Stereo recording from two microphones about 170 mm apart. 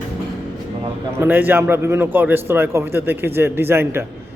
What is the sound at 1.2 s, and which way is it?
A man's voice, 10° right (ahead or behind).